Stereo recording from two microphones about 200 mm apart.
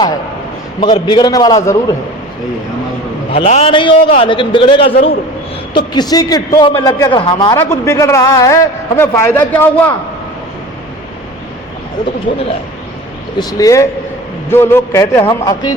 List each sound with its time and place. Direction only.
0.8 s a man's voice: 25° left (ahead or behind)
3.3 s a man's voice: 30° left (ahead or behind); by 9.9 s 10° left (ahead or behind)
13.4 s a man's voice: 20° left (ahead or behind)